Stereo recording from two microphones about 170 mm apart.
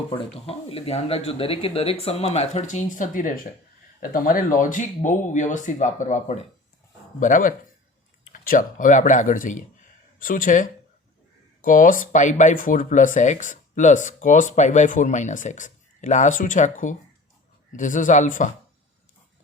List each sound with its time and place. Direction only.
0.4 s speech: 35° left (ahead or behind)